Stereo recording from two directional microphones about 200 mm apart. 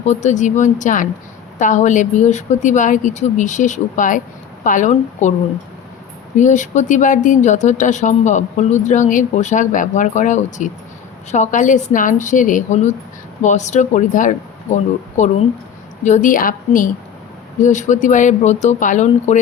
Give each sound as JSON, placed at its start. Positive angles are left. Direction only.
{"t": 0.0, "sound": "speech", "side_deg": 35}
{"t": 6.3, "sound": "speech", "side_deg": 40}